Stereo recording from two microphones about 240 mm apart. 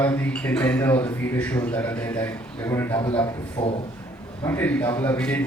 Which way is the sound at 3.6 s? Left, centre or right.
Left.